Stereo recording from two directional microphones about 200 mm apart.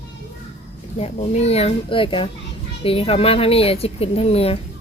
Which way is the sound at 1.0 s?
30° left (ahead or behind).